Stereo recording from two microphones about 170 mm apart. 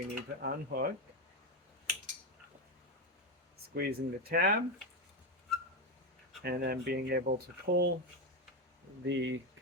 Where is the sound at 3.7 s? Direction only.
65° right (ahead or behind).